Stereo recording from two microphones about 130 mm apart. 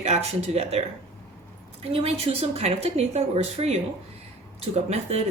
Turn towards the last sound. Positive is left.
turn(degrees=-55)  # may be behind; listen again after turning